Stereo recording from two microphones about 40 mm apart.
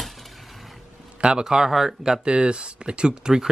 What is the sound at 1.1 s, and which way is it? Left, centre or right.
Speech, right.